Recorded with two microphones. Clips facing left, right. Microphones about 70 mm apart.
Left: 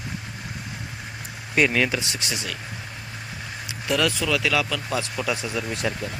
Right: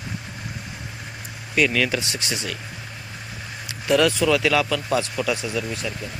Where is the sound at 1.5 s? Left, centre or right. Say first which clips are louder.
Even; left.